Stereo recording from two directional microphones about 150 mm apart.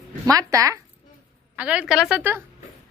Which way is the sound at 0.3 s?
20° right (ahead or behind).